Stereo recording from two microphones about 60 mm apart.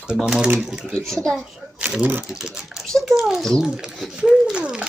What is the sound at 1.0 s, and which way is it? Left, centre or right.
Speech, centre.